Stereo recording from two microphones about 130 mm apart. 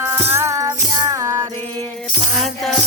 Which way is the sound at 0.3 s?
20° right (ahead or behind).